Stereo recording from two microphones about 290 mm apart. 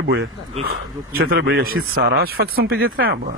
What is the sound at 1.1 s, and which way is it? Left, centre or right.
Speech, right.